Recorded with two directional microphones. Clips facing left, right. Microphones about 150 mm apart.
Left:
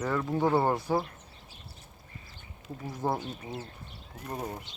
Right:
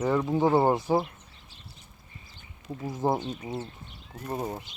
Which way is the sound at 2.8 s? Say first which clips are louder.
Right 4 dB; 20° right (ahead or behind).